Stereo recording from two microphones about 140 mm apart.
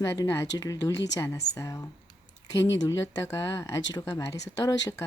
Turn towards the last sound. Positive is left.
turn(degrees=25)  # may be behind; listen again after turning